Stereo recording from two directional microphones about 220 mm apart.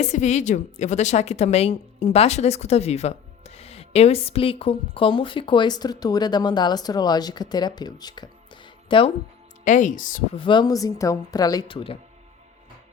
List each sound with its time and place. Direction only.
0.0 s a woman's voice: 30° left (ahead or behind)
9.6 s speech: 35° left (ahead or behind)
10.3 s speech: 20° left (ahead or behind)